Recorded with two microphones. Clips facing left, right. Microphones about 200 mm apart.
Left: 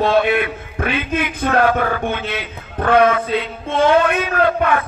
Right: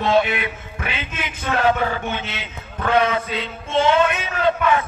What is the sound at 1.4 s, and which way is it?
Music, 55° left (ahead or behind).